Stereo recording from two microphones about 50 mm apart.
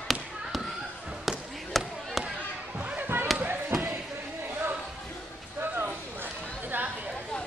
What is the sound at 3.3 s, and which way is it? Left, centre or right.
Basketball bounce, centre.